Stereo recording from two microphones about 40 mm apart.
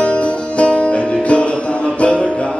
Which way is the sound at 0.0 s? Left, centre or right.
Left.